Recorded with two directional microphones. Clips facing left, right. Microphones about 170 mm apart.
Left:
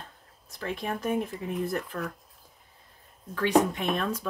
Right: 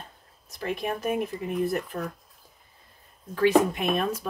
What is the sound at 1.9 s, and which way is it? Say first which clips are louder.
Speech: right 2 dB; 20° right (ahead or behind).